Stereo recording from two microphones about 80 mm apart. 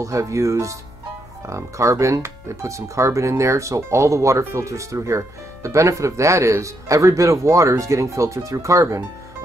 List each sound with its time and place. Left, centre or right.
0.0 s speech: right